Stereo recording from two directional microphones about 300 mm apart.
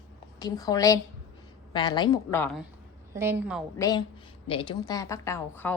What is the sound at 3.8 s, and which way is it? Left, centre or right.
A woman's voice, centre.